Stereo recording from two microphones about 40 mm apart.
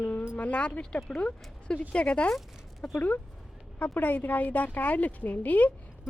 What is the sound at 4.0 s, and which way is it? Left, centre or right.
A woman's voice, left.